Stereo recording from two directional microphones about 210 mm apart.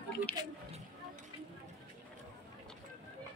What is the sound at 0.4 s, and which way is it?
Speech, 20° right (ahead or behind).